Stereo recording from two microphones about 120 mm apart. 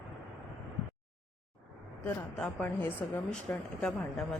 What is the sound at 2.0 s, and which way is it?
A woman's voice, 10° left (ahead or behind).